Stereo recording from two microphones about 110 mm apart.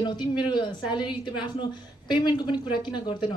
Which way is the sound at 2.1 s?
40° left (ahead or behind).